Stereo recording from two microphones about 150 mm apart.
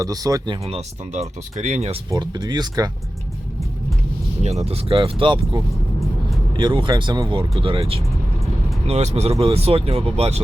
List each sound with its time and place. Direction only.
0.0 s speech: 25° right (ahead or behind); by 2.0 s 50° right (ahead or behind)
2.0 s speech: 30° right (ahead or behind)
4.4 s speech: 45° right (ahead or behind)